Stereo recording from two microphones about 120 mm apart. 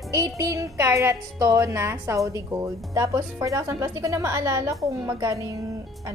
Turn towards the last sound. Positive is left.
turn(degrees=-25)  # may be behind; listen again after turning